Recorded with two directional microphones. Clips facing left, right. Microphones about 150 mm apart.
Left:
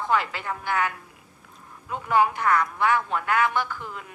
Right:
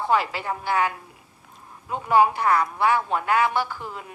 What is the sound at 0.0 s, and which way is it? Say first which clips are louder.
A woman's voice: right 2 dB; 15° right (ahead or behind).